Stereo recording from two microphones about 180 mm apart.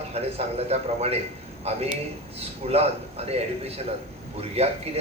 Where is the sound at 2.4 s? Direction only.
35° right (ahead or behind).